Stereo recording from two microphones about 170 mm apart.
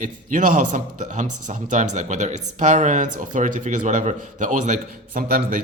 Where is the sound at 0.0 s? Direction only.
50° right (ahead or behind).